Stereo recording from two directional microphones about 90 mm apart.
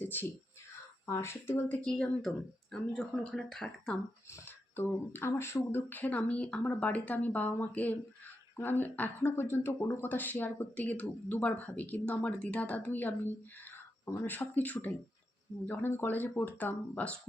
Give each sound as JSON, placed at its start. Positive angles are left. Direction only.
{"t": 0.0, "sound": "a sound", "side_deg": 20}
{"t": 1.0, "sound": "speech", "side_deg": 30}
{"t": 4.3, "sound": "speech", "side_deg": 25}
{"t": 14.0, "sound": "speech", "side_deg": 30}
{"t": 14.3, "sound": "speech", "side_deg": 20}